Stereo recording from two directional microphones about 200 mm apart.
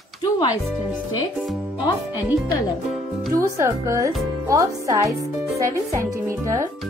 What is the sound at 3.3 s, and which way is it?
Speech, 15° right (ahead or behind).